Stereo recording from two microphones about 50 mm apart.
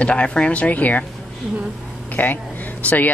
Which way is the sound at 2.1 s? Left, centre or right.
Left.